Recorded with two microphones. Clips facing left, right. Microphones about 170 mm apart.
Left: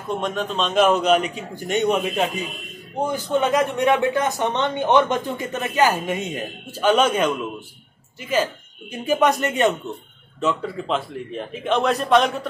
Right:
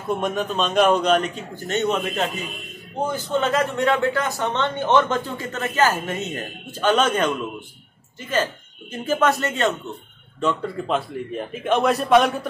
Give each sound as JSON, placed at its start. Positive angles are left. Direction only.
{"t": 0.2, "sound": "a man's voice", "side_deg": -5}
{"t": 10.4, "sound": "a man's voice", "side_deg": 0}